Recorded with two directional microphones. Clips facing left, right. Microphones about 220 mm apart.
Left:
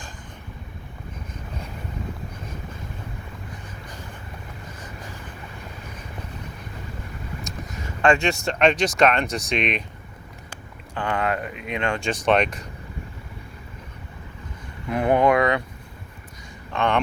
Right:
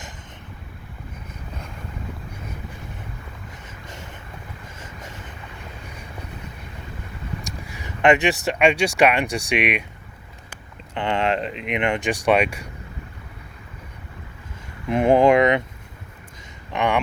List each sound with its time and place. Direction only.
7.4 s speech: 15° right (ahead or behind)
10.9 s speech: 25° right (ahead or behind)
14.8 s speech: 25° right (ahead or behind)
16.7 s speech: 15° right (ahead or behind)